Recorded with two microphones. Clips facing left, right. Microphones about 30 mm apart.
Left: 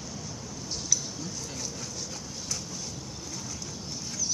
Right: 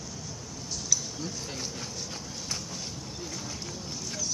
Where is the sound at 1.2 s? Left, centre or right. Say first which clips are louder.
Right 1 dB; centre.